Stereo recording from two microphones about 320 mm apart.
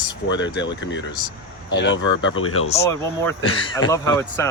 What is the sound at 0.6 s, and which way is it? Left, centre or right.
Speech, left.